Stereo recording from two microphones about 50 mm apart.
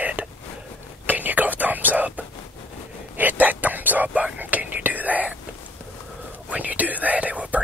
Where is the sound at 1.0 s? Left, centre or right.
Right.